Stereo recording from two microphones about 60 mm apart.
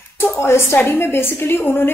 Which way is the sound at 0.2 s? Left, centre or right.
Left.